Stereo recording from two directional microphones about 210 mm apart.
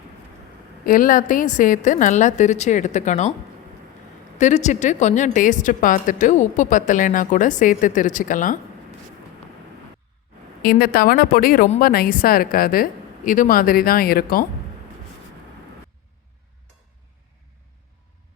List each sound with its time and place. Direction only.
0.9 s speech: 40° left (ahead or behind)
4.4 s speech: 35° left (ahead or behind)
10.6 s speech: 45° left (ahead or behind)